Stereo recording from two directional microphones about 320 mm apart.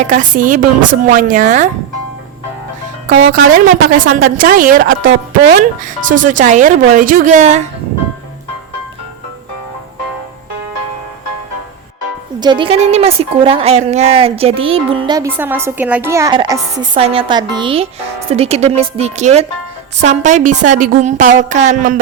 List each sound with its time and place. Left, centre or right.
0.0 s a woman's voice: right
3.1 s a woman's voice: right
12.4 s a woman's voice: centre